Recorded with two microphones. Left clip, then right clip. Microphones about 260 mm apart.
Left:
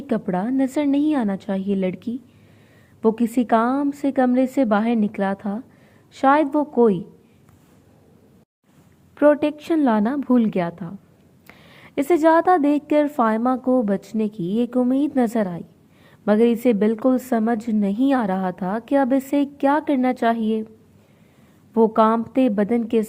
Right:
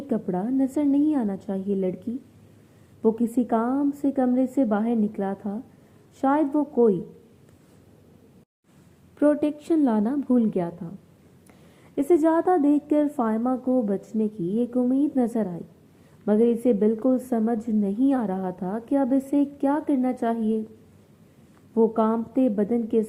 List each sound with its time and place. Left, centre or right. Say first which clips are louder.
0.1 s a woman's voice: left 4 dB; left
3.0 s a woman's voice: left 3 dB; left
9.1 s a woman's voice: left 5 dB; left
21.8 s a woman's voice: left 5 dB; left